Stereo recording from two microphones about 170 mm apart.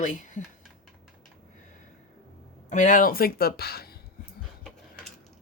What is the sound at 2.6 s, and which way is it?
Speech, 45° left (ahead or behind).